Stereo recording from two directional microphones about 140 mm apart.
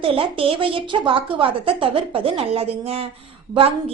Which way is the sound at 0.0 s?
40° right (ahead or behind).